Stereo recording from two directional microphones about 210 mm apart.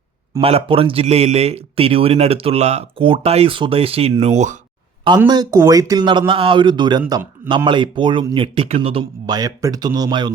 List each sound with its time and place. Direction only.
0.4 s speech: 25° right (ahead or behind)
5.0 s speech: 20° right (ahead or behind)